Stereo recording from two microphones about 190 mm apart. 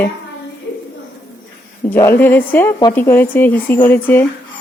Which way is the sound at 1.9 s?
10° left (ahead or behind).